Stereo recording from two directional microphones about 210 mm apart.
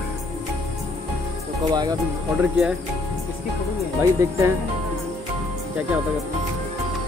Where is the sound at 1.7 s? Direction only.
20° right (ahead or behind).